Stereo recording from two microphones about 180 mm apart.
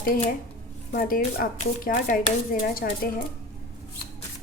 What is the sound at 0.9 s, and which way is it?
Speech, 50° left (ahead or behind).